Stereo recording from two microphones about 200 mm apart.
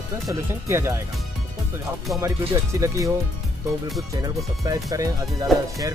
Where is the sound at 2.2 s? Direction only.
15° right (ahead or behind).